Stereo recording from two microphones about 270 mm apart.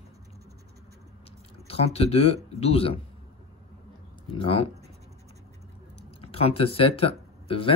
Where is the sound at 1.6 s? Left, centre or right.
Left.